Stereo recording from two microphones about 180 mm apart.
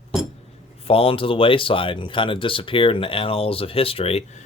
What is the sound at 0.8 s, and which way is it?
Speech, 30° left (ahead or behind).